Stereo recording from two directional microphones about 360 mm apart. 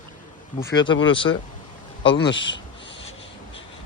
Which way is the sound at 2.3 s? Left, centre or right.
Left.